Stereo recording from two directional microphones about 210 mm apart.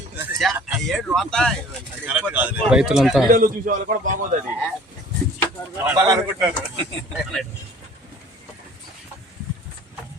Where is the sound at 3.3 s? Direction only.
40° right (ahead or behind).